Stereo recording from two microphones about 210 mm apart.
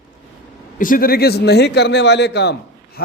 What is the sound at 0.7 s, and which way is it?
A man's voice, 40° left (ahead or behind).